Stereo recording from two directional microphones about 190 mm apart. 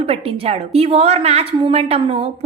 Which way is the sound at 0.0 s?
30° right (ahead or behind).